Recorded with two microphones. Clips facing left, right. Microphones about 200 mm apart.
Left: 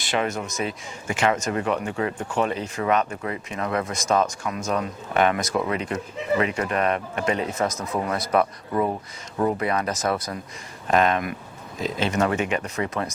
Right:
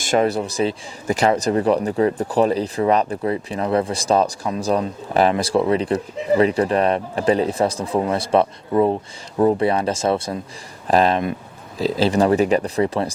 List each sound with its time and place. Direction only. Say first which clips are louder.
0.0 s speech: right 7 dB; 40° right (ahead or behind)